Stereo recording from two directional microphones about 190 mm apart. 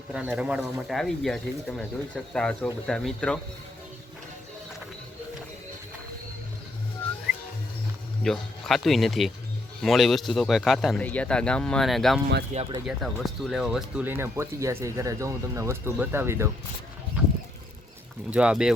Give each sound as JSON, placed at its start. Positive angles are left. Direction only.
{"t": 0.1, "sound": "speech", "side_deg": -5}
{"t": 8.2, "sound": "speech", "side_deg": 0}
{"t": 12.5, "sound": "speech", "side_deg": -40}
{"t": 12.9, "sound": "speech", "side_deg": 0}
{"t": 18.3, "sound": "speech", "side_deg": -5}